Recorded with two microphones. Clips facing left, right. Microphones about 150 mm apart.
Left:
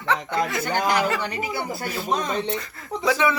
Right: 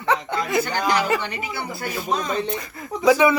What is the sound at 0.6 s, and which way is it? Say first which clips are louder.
Speech: even; 50° left (ahead or behind).